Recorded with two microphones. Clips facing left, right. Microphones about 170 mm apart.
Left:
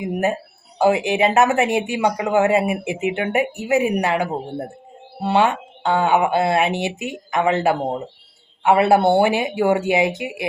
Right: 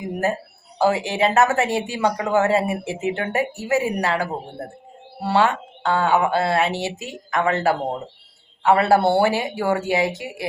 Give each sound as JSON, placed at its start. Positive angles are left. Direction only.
{"t": 0.0, "sound": "speech", "side_deg": 20}